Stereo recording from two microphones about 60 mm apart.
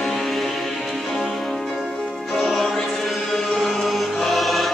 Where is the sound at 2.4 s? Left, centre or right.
Centre.